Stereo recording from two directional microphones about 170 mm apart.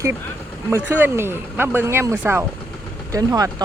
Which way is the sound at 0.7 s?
15° right (ahead or behind).